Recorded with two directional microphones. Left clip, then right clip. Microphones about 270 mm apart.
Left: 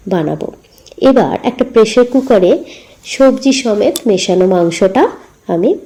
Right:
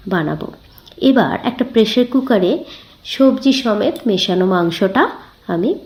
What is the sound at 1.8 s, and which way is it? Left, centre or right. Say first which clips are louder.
A woman's voice: left 6 dB; centre.